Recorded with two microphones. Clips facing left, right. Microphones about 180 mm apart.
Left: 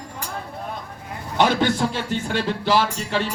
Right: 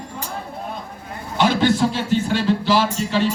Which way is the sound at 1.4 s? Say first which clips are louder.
Right 2 dB; 55° left (ahead or behind).